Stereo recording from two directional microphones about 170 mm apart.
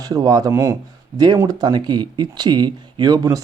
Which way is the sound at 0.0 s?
20° right (ahead or behind).